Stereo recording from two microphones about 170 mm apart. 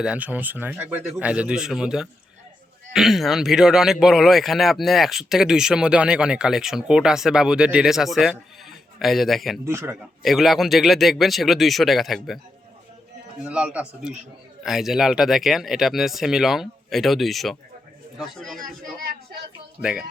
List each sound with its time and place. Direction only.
0.0 s speech: 10° right (ahead or behind)
9.6 s speech: 15° right (ahead or behind)
10.0 s speech: centre (ahead or behind)
13.4 s speech: 5° right (ahead or behind)
18.6 s a sound: 65° right (ahead or behind)
19.8 s speech: 5° right (ahead or behind)